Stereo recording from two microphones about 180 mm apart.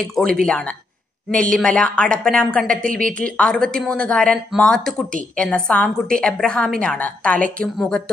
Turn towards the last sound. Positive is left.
turn(degrees=5)  # may be behind; listen again after turning